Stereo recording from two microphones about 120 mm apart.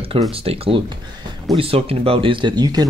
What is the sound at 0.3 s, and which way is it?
Speech, 50° right (ahead or behind).